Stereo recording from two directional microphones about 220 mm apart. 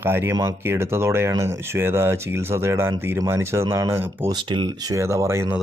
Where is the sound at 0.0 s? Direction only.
10° right (ahead or behind).